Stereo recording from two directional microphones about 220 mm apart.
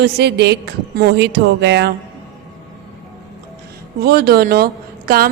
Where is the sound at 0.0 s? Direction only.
50° right (ahead or behind).